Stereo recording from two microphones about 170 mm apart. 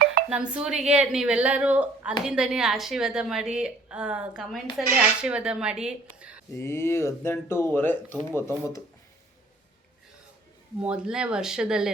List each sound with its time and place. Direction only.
0.0 s dishes: 65° right (ahead or behind)
0.3 s a woman's voice: 5° right (ahead or behind)
6.6 s speech: 15° left (ahead or behind)
10.8 s a woman's voice: 5° right (ahead or behind)